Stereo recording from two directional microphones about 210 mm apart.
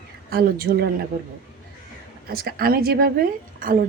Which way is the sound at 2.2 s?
45° right (ahead or behind).